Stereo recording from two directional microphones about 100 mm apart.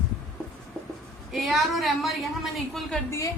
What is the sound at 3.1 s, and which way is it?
Speech, 35° left (ahead or behind).